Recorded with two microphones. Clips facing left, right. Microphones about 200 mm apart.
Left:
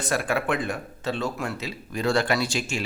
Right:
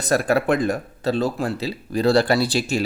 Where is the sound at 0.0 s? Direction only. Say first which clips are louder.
Right 6 dB; 40° right (ahead or behind).